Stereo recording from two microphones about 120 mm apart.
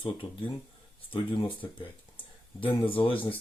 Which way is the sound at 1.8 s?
45° left (ahead or behind).